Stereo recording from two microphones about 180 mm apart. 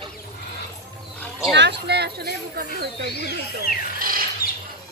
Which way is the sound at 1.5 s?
70° right (ahead or behind).